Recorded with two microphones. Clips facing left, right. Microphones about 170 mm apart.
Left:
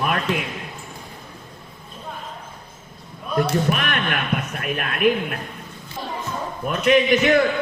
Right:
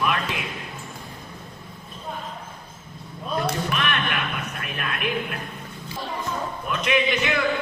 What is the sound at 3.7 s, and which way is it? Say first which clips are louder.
Basketball bounce: left 3 dB; 45° left (ahead or behind).